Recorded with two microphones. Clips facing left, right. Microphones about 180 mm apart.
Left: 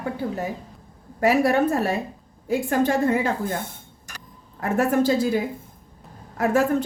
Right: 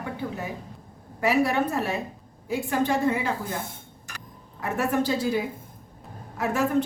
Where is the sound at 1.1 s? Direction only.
45° left (ahead or behind).